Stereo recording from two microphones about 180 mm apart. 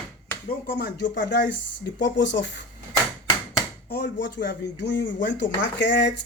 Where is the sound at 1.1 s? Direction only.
75° left (ahead or behind).